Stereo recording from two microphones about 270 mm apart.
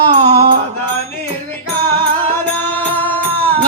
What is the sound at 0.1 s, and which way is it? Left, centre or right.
Music, right.